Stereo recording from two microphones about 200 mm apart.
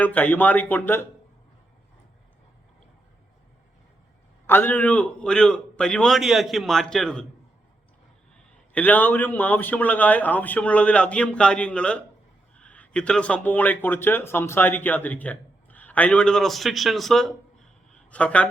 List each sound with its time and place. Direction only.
0.0 s a man's voice: 10° left (ahead or behind)
4.4 s a man's voice: 10° left (ahead or behind)
8.7 s a man's voice: 10° left (ahead or behind)